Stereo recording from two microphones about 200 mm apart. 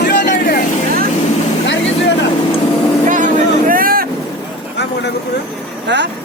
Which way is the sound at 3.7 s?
45° right (ahead or behind).